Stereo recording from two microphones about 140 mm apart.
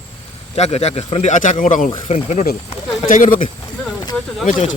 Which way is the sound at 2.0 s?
50° left (ahead or behind).